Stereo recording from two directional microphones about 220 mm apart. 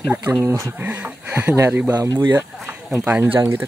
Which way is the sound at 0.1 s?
10° right (ahead or behind).